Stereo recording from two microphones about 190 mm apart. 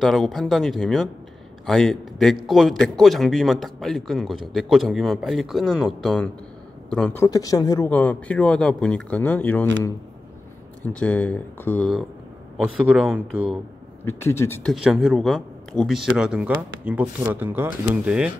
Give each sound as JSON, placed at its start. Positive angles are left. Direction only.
{"t": 0.0, "sound": "a man's voice", "side_deg": 0}
{"t": 7.2, "sound": "speech", "side_deg": 20}
{"t": 7.9, "sound": "speech", "side_deg": 10}
{"t": 10.9, "sound": "a man's voice", "side_deg": 5}
{"t": 14.0, "sound": "speech", "side_deg": 15}
{"t": 14.7, "sound": "a man's voice", "side_deg": -5}